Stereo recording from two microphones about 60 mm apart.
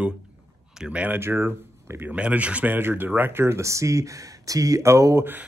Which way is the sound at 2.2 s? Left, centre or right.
Right.